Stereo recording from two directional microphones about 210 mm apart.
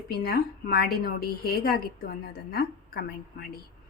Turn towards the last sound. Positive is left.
turn(degrees=45)  # may be behind; listen again after turning